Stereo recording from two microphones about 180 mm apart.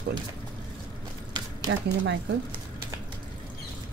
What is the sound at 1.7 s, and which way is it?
Speech, 80° right.